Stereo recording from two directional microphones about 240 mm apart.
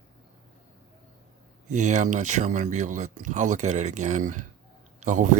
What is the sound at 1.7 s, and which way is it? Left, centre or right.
Speech, right.